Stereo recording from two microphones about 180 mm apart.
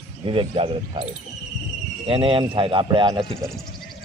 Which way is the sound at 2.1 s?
30° right (ahead or behind).